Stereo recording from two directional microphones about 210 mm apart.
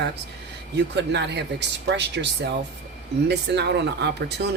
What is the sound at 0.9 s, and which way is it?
Speech, 55° right (ahead or behind).